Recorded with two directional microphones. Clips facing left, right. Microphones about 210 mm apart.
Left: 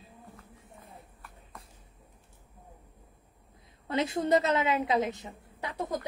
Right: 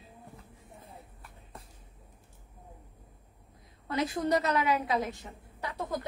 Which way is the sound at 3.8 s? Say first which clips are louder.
Left 1 dB; 25° left (ahead or behind).